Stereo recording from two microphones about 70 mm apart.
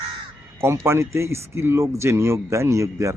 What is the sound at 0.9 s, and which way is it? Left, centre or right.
Speech, right.